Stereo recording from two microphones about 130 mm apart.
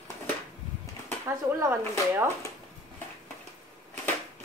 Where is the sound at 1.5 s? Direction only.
15° right (ahead or behind).